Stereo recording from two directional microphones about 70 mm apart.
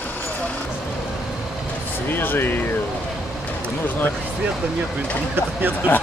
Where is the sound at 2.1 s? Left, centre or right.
Left.